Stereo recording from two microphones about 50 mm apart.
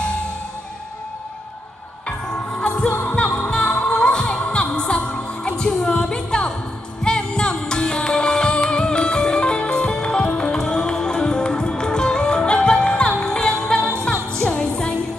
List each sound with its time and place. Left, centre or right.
2.9 s music: left
3.5 s music: centre